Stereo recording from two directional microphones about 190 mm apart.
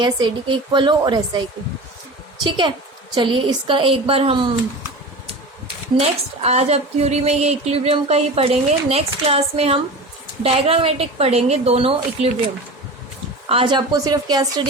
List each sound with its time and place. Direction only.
0.0 s a woman's voice: 20° right (ahead or behind)
5.6 s speech: 35° right (ahead or behind)
13.5 s a woman's voice: 25° right (ahead or behind)